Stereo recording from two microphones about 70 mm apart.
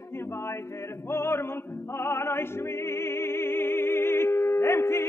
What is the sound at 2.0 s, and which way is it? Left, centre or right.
Opera, left.